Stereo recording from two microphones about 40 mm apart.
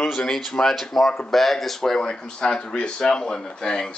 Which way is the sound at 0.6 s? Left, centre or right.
Centre.